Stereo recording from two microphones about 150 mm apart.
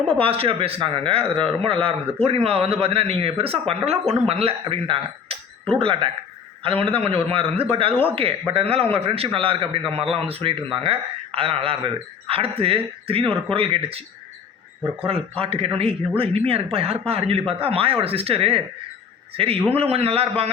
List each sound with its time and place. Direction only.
0.1 s a man's voice: 40° right (ahead or behind)
15.0 s a man's voice: 40° right (ahead or behind)
19.7 s a man's voice: 40° right (ahead or behind)